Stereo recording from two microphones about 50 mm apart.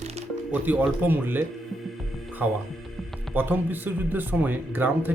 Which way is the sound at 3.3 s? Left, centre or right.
Right.